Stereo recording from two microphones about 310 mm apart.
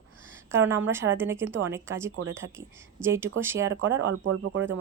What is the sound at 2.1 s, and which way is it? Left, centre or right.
Speech, right.